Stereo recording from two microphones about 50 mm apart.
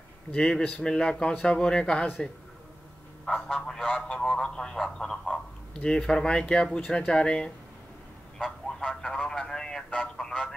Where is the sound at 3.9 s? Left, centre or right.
Centre.